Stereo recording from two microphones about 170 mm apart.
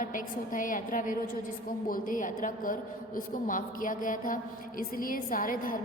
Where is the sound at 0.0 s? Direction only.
50° left (ahead or behind).